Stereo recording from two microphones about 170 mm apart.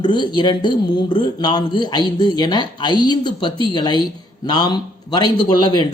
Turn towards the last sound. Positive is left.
turn(degrees=25)  # may be behind; listen again after turning